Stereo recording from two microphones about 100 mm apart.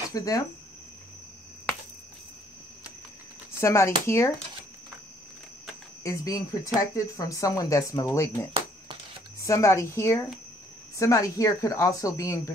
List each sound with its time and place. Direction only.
0.1 s speech: 35° left (ahead or behind)
3.5 s a woman's voice: 30° left (ahead or behind)
6.0 s a woman's voice: 35° left (ahead or behind)